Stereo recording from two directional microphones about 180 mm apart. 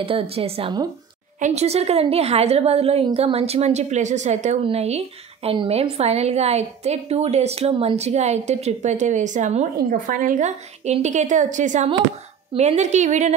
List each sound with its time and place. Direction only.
0.0 s a woman's voice: 30° right (ahead or behind)